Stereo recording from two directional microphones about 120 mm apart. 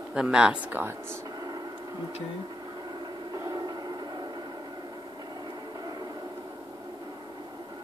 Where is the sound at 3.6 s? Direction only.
35° right (ahead or behind).